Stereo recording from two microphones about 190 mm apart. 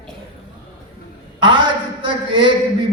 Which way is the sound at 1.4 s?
25° right (ahead or behind).